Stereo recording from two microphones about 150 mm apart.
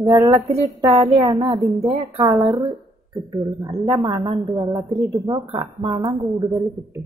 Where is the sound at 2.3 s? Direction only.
Centre (ahead or behind).